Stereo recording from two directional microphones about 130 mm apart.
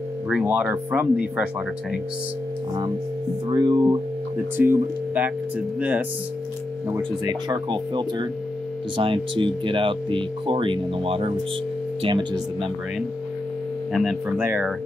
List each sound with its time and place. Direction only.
0.3 s speech: 5° right (ahead or behind)
3.4 s speech: 35° right (ahead or behind)
4.6 s speech: 15° right (ahead or behind)
7.0 s speech: 35° right (ahead or behind)
14.4 s speech: 15° right (ahead or behind)